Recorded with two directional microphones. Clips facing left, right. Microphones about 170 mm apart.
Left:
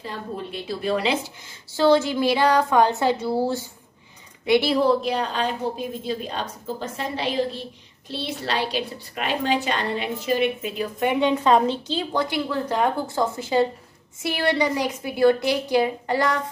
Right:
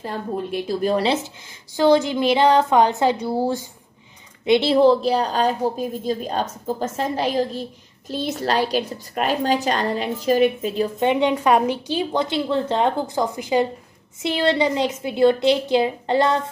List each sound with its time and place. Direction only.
0.0 s a woman's voice: 45° right (ahead or behind)
1.7 s a woman's voice: 15° right (ahead or behind)